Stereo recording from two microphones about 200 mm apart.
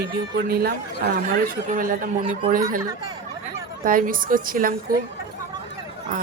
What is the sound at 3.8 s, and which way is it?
Speech, 45° right (ahead or behind).